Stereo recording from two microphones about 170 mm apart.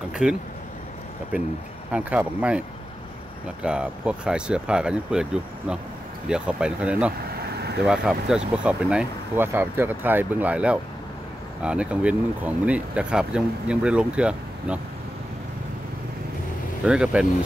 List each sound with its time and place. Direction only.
0.1 s a sound: 5° right (ahead or behind)
1.9 s speech: 5° right (ahead or behind)
3.6 s speech: 5° right (ahead or behind)
7.3 s vehicle: 70° right (ahead or behind)
7.8 s speech: 5° right (ahead or behind)
16.8 s speech: 5° right (ahead or behind)